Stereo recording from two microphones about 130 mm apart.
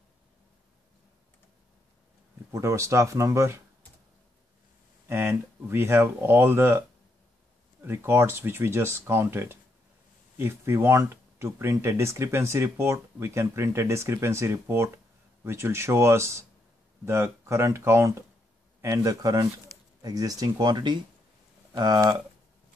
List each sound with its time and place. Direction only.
2.5 s speech: 20° right (ahead or behind)
5.0 s speech: 20° right (ahead or behind)
7.8 s speech: 20° right (ahead or behind); by 22.2 s 35° right (ahead or behind)